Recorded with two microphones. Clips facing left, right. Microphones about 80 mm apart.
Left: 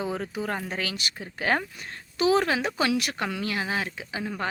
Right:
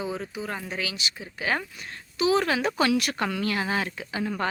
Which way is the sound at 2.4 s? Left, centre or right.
Left.